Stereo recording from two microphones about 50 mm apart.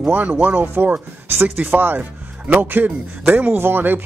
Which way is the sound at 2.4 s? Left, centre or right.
Right.